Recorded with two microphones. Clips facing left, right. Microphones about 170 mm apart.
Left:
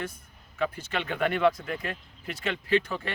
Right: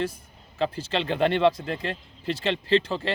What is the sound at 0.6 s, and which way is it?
A man's voice, 30° right (ahead or behind).